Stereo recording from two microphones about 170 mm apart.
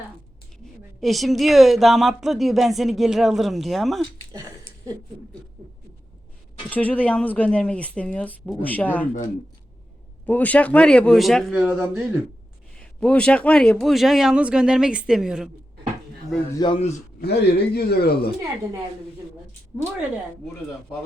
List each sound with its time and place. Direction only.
1.0 s speech: centre (ahead or behind)
4.3 s speech: 15° right (ahead or behind)
6.7 s speech: 10° left (ahead or behind)
10.2 s speech: 10° left (ahead or behind); by 12.2 s 10° right (ahead or behind)
12.7 s speech: 5° left (ahead or behind)
16.6 s a man's voice: 30° left (ahead or behind)
17.2 s speech: 70° left (ahead or behind)